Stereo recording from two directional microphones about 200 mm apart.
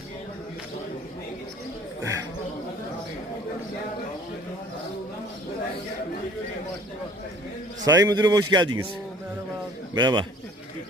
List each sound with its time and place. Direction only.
7.9 s a man's voice: 20° right (ahead or behind)
9.9 s a man's voice: 20° right (ahead or behind)